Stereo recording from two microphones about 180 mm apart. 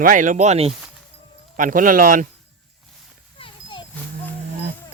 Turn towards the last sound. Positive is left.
turn(degrees=25)  # may be behind; listen again after turning